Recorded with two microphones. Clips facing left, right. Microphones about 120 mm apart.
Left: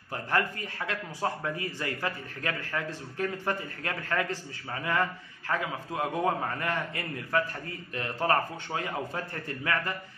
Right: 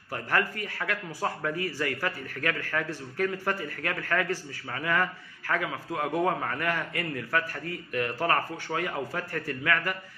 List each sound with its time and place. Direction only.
0.1 s a man's voice: 20° left (ahead or behind)